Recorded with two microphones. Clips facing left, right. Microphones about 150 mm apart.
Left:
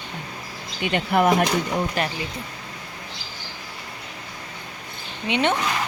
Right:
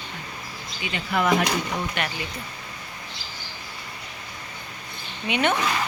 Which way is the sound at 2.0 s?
35° left (ahead or behind).